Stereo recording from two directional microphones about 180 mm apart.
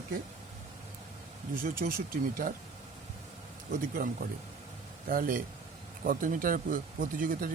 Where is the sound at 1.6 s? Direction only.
50° right (ahead or behind).